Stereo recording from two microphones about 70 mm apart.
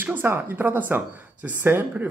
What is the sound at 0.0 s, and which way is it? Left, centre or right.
A man's voice, right.